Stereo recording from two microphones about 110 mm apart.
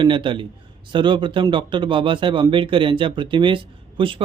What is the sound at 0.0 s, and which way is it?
Speech, 50° right (ahead or behind).